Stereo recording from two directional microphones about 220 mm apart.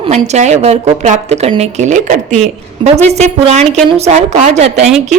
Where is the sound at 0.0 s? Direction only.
30° right (ahead or behind).